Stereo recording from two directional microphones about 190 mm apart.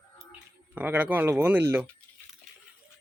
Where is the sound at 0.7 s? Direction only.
5° right (ahead or behind).